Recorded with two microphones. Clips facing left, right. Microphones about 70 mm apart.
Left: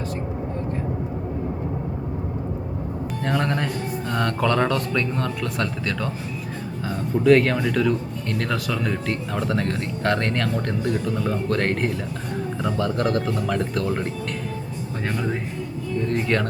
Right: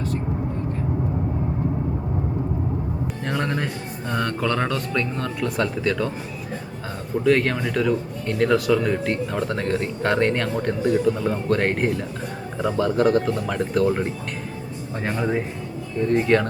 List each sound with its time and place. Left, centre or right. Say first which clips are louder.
3.2 s speech: left 2 dB; centre
7.3 s speech: left 3 dB; centre
15.1 s speech: right 4 dB; centre